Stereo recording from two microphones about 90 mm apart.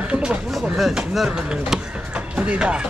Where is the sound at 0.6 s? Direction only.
5° right (ahead or behind).